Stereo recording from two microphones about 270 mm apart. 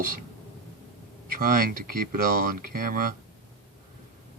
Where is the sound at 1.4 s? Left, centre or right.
Right.